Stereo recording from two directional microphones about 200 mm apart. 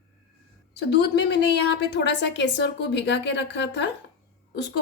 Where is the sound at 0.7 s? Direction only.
55° left (ahead or behind).